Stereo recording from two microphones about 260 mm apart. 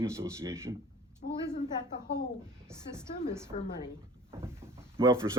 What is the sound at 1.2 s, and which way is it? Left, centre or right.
Speech, left.